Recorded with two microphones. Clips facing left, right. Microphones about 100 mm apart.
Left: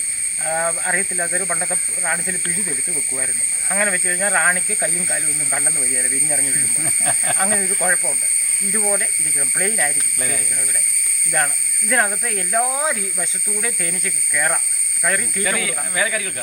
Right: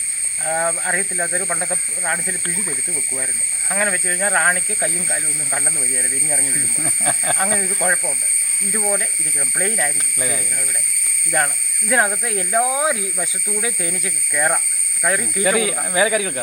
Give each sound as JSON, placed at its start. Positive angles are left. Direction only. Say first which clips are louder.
{"t": 0.4, "sound": "speech", "louder": "right 1 dB", "side_deg": -5}